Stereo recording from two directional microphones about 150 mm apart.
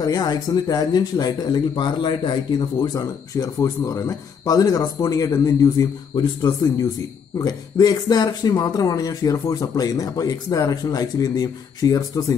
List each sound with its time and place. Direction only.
0.0 s speech: 25° left (ahead or behind)